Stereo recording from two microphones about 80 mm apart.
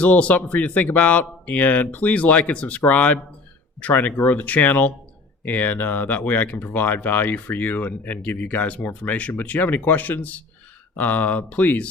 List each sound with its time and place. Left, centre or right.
0.0 s speech: centre